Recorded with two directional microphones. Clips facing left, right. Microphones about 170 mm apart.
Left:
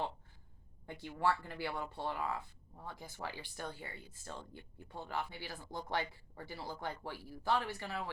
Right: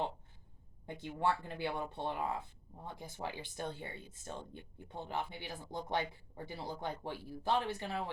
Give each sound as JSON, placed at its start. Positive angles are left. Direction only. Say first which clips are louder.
{"t": 0.9, "sound": "speech", "louder": "even", "side_deg": -20}